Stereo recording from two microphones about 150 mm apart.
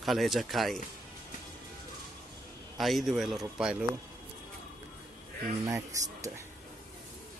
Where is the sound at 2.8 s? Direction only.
Centre (ahead or behind).